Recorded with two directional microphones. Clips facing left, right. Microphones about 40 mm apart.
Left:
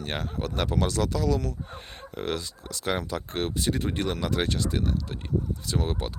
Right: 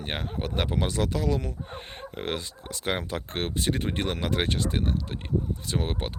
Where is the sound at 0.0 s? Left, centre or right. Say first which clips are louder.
Left 1 dB; right.